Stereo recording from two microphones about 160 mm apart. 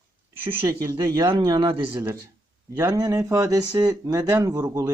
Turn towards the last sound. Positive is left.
turn(degrees=-25)  # may be behind; listen again after turning